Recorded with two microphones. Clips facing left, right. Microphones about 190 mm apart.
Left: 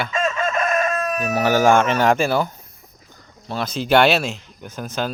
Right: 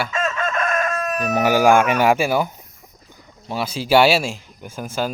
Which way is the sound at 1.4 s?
10° right (ahead or behind).